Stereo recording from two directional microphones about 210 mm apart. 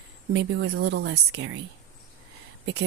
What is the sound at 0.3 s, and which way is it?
Speech, 55° right (ahead or behind).